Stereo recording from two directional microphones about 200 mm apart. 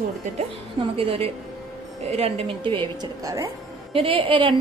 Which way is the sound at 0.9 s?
30° right (ahead or behind).